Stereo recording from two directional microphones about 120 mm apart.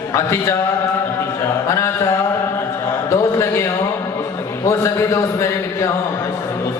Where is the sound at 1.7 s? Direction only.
25° left (ahead or behind).